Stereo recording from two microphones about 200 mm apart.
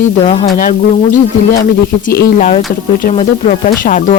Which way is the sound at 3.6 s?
40° left (ahead or behind).